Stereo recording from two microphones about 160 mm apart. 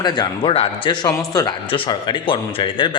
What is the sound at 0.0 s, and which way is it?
Speech, 25° left (ahead or behind).